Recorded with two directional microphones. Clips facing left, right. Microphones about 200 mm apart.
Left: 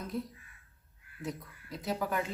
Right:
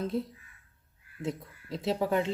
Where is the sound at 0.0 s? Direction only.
25° right (ahead or behind).